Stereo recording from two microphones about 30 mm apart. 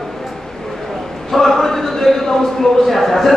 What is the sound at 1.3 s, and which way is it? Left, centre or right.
A man's voice, centre.